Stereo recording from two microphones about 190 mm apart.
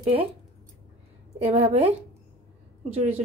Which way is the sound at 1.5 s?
30° right (ahead or behind).